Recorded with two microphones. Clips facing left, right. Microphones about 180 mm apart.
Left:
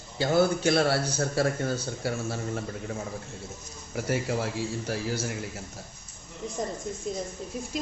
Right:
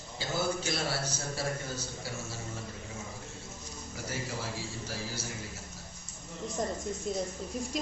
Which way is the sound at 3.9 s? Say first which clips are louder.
Left 10 dB; 60° left (ahead or behind).